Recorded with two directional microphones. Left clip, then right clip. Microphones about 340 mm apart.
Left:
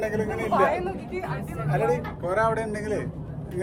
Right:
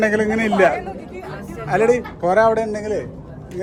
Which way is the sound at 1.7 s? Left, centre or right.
Right.